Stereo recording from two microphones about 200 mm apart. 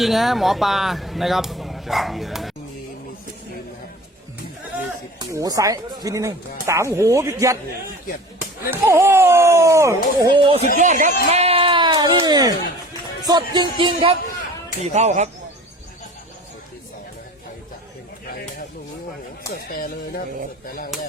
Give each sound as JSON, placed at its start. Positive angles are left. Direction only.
{"t": 0.0, "sound": "speech", "side_deg": 0}
{"t": 5.2, "sound": "speech", "side_deg": -20}
{"t": 8.7, "sound": "speech", "side_deg": -15}
{"t": 10.8, "sound": "a sound", "side_deg": -40}
{"t": 13.2, "sound": "speech", "side_deg": -20}
{"t": 19.5, "sound": "speech", "side_deg": 50}